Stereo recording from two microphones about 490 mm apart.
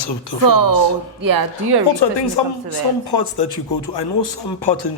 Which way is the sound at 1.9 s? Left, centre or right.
Left.